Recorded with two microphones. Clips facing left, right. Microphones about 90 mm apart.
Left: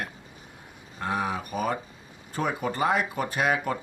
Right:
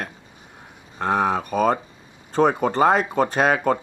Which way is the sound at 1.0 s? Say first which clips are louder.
Right 8 dB; 60° right (ahead or behind).